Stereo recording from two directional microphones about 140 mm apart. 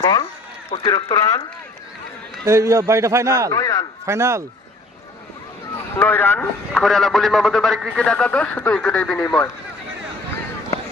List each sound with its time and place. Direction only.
0.0 s speech: 30° left (ahead or behind)
2.4 s a man's voice: 20° right (ahead or behind)
3.5 s speech: 25° left (ahead or behind)
4.0 s a man's voice: 20° right (ahead or behind)
6.0 s speech: 15° left (ahead or behind)
6.7 s a man's voice: centre (ahead or behind)